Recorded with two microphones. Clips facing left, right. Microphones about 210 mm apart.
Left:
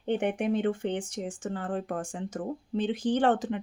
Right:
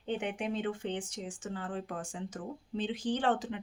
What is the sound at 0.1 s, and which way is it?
Speech, 55° left (ahead or behind).